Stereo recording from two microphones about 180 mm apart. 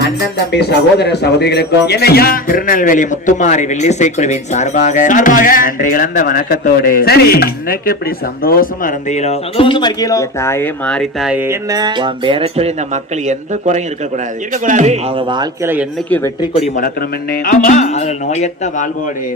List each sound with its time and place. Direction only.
0.5 s a man's voice: 65° left (ahead or behind); by 14.9 s 45° right (ahead or behind)
15.1 s speech: 25° right (ahead or behind)
15.6 s speech: 10° right (ahead or behind)
16.0 s speech: 10° left (ahead or behind)
16.4 s speech: 35° left (ahead or behind)
17.4 s speech: 50° left (ahead or behind)